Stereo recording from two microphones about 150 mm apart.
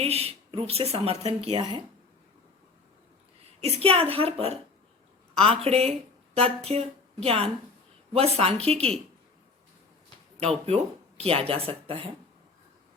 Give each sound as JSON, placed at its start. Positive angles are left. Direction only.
{"t": 0.0, "sound": "speech", "side_deg": -40}
{"t": 3.6, "sound": "a woman's voice", "side_deg": -40}
{"t": 10.4, "sound": "speech", "side_deg": -40}